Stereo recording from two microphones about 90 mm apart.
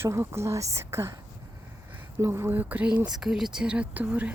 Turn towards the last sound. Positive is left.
turn(degrees=-20)  # may be behind; listen again after turning